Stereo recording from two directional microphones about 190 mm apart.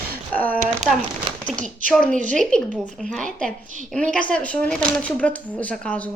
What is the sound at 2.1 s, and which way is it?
Speech, 40° right (ahead or behind).